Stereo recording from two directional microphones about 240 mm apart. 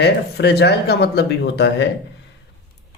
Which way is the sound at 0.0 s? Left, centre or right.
Left.